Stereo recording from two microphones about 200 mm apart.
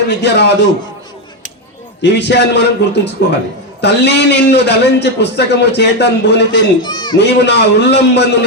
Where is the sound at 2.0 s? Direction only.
60° left (ahead or behind).